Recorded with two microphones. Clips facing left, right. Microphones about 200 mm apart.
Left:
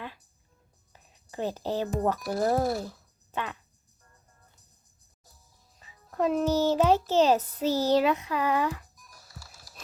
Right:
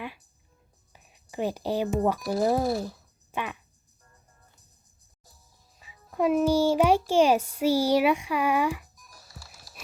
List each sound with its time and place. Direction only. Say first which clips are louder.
0.9 s a sound: right 3 dB; 15° right (ahead or behind)
1.9 s speech: right 2 dB; 10° right (ahead or behind)
5.8 s speech: right 2 dB; 10° right (ahead or behind)
9.1 s music: right 1 dB; 30° right (ahead or behind)